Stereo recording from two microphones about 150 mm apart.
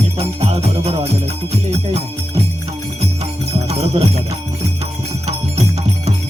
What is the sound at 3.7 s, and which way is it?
Jingle bell, 45° right (ahead or behind).